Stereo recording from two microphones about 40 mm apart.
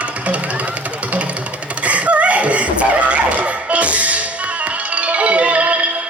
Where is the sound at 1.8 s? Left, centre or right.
Right.